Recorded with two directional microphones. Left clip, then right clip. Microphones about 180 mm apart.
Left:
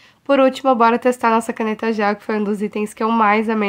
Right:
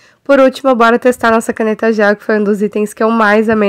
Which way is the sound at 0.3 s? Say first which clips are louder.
Right 6 dB; 30° right (ahead or behind).